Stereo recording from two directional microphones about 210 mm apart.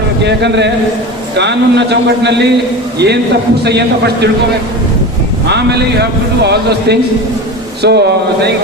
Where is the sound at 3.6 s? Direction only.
50° right (ahead or behind).